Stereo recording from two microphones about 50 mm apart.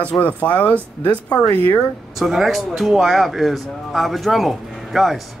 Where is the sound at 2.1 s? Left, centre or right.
Centre.